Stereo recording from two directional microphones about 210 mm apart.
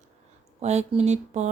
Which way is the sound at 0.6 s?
30° right (ahead or behind).